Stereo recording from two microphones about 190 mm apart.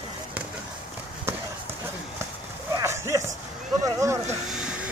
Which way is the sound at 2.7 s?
15° right (ahead or behind).